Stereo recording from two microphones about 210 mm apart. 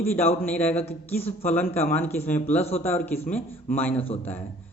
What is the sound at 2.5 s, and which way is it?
Speech, 30° left (ahead or behind).